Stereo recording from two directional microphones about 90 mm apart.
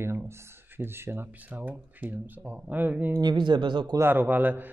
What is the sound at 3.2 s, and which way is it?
Speech, 60° right (ahead or behind).